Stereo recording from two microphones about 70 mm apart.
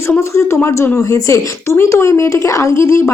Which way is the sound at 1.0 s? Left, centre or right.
Left.